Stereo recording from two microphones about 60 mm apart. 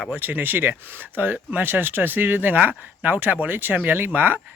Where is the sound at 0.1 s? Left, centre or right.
Right.